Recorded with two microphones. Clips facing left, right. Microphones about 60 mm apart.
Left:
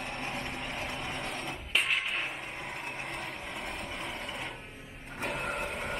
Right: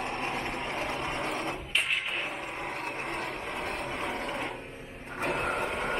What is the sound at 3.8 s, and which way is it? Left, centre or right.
Vehicle, centre.